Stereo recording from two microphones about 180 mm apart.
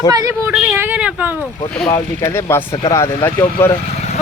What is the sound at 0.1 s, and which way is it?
Speech, 20° right (ahead or behind).